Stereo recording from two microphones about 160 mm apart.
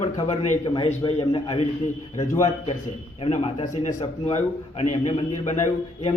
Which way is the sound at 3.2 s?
35° left (ahead or behind).